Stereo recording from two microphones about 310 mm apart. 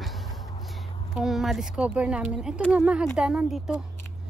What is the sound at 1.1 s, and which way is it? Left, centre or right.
Speech, centre.